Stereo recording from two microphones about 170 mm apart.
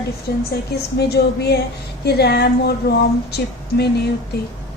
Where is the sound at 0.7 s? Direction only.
75° left (ahead or behind).